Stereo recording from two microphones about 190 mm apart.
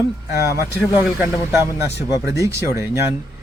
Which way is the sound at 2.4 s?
15° right (ahead or behind).